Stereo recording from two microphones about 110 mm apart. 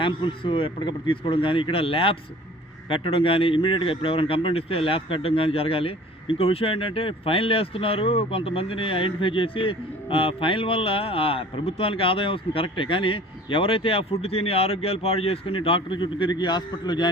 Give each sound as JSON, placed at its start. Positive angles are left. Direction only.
{"t": 0.0, "sound": "a man's voice", "side_deg": 50}